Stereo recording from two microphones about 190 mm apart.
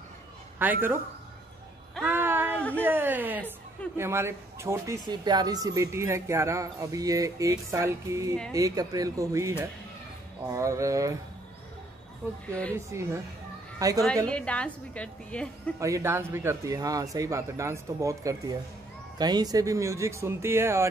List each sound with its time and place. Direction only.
0.6 s speech: 10° right (ahead or behind)
2.0 s a sound: 10° right (ahead or behind)
2.7 s speech: 10° right (ahead or behind)
12.2 s speech: 10° right (ahead or behind)
14.3 s a woman's voice: 5° left (ahead or behind)
15.8 s speech: 15° right (ahead or behind)